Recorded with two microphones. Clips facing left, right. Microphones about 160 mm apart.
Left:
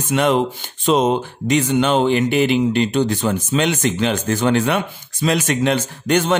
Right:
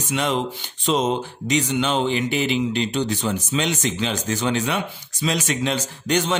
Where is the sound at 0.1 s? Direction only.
55° left (ahead or behind).